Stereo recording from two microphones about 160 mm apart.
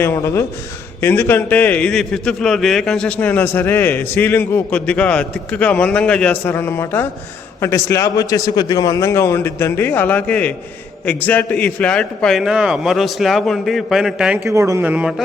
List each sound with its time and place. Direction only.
0.0 s a man's voice: 15° left (ahead or behind); by 14.3 s 5° right (ahead or behind)
14.4 s a man's voice: 20° right (ahead or behind)